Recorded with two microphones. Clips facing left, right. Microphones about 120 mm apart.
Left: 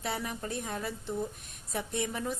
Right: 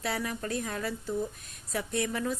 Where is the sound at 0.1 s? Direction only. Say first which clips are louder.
Right 2 dB; 20° left (ahead or behind).